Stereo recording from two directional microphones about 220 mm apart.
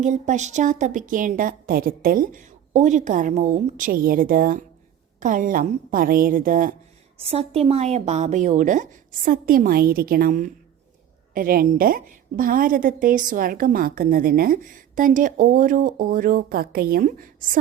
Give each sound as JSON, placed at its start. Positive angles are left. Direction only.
{"t": 0.0, "sound": "a woman's voice", "side_deg": -35}
{"t": 7.2, "sound": "a woman's voice", "side_deg": -25}